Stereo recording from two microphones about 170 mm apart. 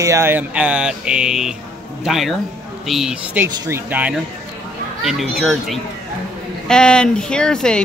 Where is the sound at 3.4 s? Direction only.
15° right (ahead or behind).